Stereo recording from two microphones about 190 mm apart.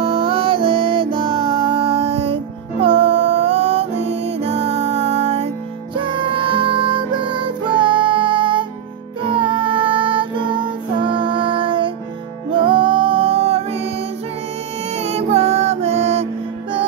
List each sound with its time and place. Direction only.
0.0 s music: 30° right (ahead or behind)